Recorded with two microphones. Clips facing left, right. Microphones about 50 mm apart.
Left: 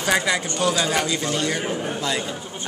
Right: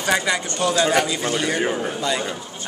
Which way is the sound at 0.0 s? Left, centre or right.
Centre.